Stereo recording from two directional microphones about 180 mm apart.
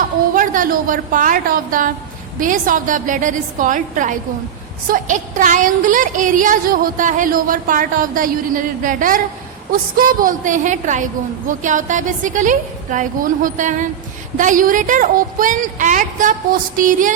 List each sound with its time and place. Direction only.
0.3 s a woman's voice: 50° right (ahead or behind)